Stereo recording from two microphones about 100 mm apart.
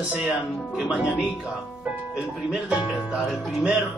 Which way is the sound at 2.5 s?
5° right (ahead or behind).